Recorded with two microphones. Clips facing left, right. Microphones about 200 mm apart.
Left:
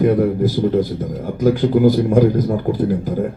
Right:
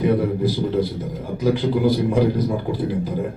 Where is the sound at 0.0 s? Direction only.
45° left (ahead or behind).